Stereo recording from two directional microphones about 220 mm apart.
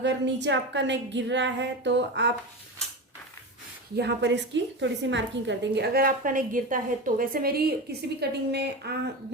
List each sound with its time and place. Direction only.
0.0 s a woman's voice: 55° right (ahead or behind)
3.9 s a woman's voice: 50° right (ahead or behind)